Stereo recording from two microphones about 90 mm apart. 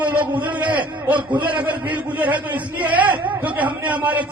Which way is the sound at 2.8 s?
15° right (ahead or behind).